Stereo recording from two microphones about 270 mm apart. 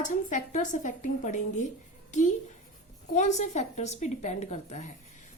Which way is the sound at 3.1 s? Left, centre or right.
Left.